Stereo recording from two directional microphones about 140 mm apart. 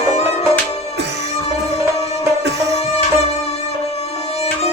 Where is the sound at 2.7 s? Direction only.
45° left (ahead or behind).